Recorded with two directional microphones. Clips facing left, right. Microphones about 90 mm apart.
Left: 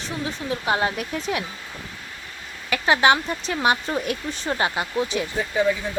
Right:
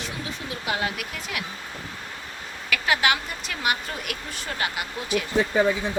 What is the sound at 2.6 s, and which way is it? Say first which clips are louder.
Speech: left 5 dB; 30° left (ahead or behind).